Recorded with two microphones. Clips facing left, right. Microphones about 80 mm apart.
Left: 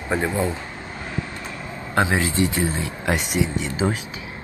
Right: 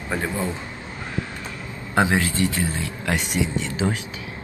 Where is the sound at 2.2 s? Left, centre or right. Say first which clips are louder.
Left 1 dB; centre.